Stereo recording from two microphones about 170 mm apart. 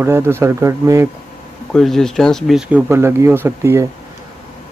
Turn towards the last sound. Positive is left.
turn(degrees=-15)  # may be behind; listen again after turning